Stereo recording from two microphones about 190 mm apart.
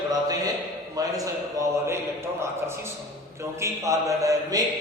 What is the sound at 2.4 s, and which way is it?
A man's voice, 15° right (ahead or behind).